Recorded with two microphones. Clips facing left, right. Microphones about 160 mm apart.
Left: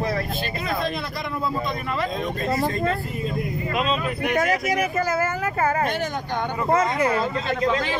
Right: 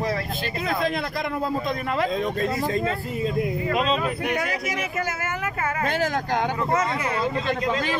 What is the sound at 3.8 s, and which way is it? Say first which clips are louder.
Speech: left 1 dB; 30° right (ahead or behind).